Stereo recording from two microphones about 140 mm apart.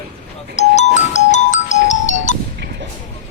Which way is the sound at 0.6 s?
55° left (ahead or behind).